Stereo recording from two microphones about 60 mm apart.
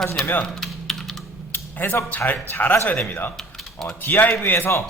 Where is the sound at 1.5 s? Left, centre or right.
Left.